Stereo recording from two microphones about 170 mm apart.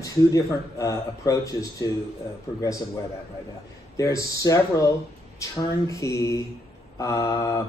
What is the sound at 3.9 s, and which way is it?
Speech, 20° left (ahead or behind).